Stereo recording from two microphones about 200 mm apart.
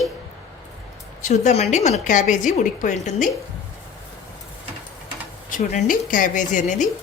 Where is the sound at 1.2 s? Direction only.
35° left (ahead or behind).